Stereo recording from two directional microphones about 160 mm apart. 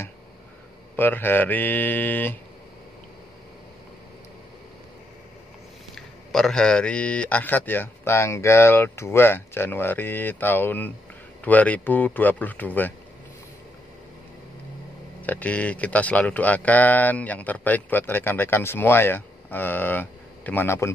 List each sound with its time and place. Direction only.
0.9 s speech: 10° left (ahead or behind)
5.9 s speech: 5° left (ahead or behind)
15.2 s speech: 10° left (ahead or behind)